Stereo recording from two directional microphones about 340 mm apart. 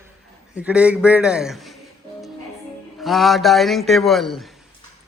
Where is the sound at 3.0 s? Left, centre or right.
Centre.